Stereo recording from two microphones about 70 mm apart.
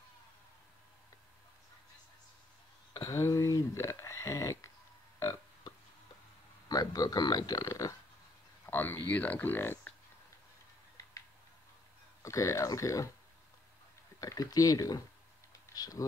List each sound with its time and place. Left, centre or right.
3.1 s a sound: left
6.7 s speech: left
8.6 s speech: left
12.2 s speech: left
14.2 s speech: left